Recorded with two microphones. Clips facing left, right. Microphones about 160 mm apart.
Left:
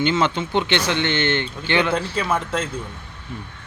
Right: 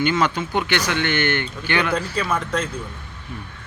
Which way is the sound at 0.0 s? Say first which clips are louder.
Even; 25° left (ahead or behind).